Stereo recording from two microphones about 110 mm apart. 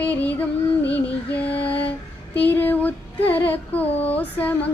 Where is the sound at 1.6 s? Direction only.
15° left (ahead or behind).